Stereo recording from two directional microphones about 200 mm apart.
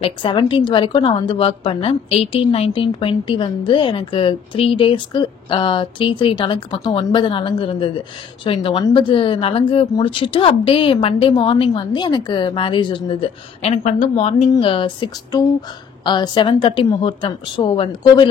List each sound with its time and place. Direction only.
0.0 s a woman's voice: 25° left (ahead or behind)